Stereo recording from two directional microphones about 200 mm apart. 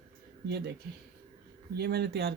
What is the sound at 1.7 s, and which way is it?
Speech, 55° right (ahead or behind).